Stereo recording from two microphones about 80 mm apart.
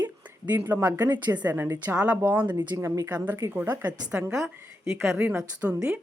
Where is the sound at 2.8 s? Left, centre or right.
Right.